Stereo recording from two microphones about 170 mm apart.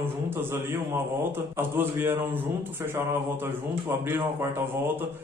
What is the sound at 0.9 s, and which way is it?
A man's voice, 15° right (ahead or behind).